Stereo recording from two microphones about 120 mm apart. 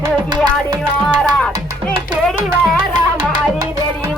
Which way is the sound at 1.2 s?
5° left (ahead or behind).